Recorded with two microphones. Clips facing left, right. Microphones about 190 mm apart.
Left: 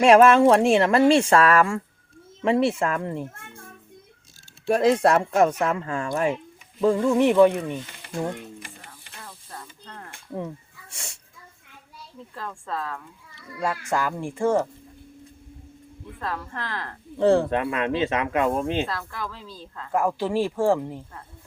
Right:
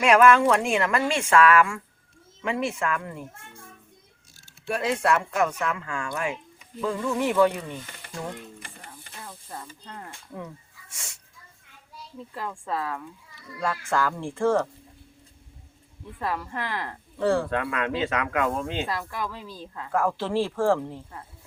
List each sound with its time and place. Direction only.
0.0 s a woman's voice: 30° left (ahead or behind)
4.7 s a woman's voice: 40° left (ahead or behind); by 8.2 s 20° left (ahead or behind)
10.9 s speech: 30° left (ahead or behind)
12.3 s a woman's voice: 15° right (ahead or behind)
13.6 s speech: 15° left (ahead or behind)
16.2 s a woman's voice: 10° right (ahead or behind)
17.2 s speech: 25° left (ahead or behind)
18.9 s a woman's voice: 15° right (ahead or behind)
19.9 s speech: 15° left (ahead or behind)